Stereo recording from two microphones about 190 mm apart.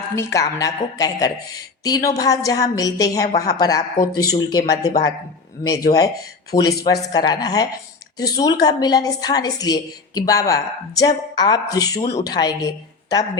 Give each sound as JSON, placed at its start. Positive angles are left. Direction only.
{"t": 0.2, "sound": "a woman's voice", "side_deg": 15}
{"t": 5.9, "sound": "speech", "side_deg": 30}
{"t": 6.5, "sound": "a woman's voice", "side_deg": 20}